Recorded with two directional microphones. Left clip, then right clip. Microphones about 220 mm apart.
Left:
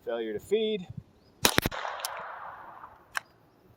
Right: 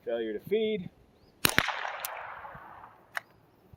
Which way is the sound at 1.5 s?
55° left (ahead or behind).